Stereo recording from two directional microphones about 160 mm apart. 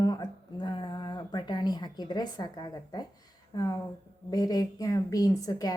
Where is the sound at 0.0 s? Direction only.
25° left (ahead or behind).